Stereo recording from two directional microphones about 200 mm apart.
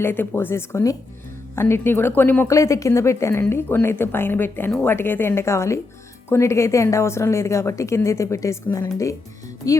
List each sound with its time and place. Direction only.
0.0 s speech: 10° left (ahead or behind)